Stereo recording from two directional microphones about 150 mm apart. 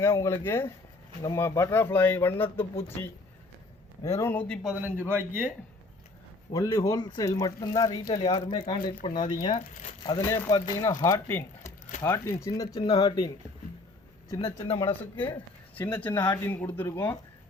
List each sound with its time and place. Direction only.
0.0 s speech: 15° left (ahead or behind)
4.6 s a man's voice: 10° right (ahead or behind)
6.5 s speech: 20° left (ahead or behind)
10.2 s speech: 15° left (ahead or behind)
14.3 s speech: 40° left (ahead or behind)
15.7 s speech: 10° left (ahead or behind)